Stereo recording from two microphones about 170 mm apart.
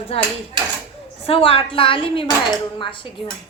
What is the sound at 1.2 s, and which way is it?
A woman's voice, 35° left (ahead or behind).